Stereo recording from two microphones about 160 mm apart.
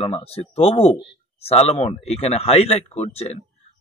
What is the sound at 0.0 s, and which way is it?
A man's voice, 35° left (ahead or behind).